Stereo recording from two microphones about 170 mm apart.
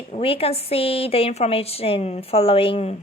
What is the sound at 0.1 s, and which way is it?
A woman's voice, 35° left (ahead or behind).